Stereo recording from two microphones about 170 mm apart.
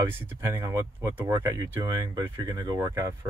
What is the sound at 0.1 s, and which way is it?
Speech, 15° right (ahead or behind).